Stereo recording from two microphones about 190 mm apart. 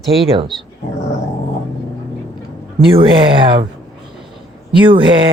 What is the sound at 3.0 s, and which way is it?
Speech, 25° right (ahead or behind).